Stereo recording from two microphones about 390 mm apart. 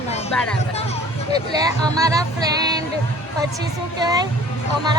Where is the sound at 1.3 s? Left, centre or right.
Centre.